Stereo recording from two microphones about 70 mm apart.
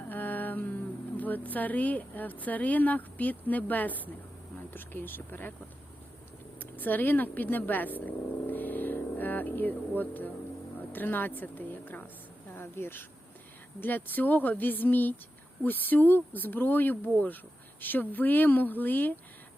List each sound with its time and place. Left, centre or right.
0.1 s speech: left
6.6 s speech: left